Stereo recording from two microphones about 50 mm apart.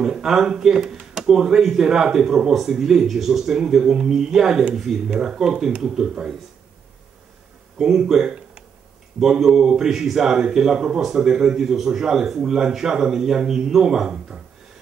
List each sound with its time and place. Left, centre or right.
0.0 s speech: centre
7.8 s speech: centre